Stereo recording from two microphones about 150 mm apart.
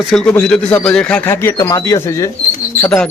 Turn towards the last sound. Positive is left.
turn(degrees=5)  # may be behind; listen again after turning